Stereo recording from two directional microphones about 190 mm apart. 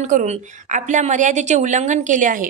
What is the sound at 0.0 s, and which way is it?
A woman's voice, 40° right (ahead or behind).